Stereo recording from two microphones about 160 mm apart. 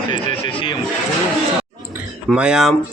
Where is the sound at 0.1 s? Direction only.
30° left (ahead or behind).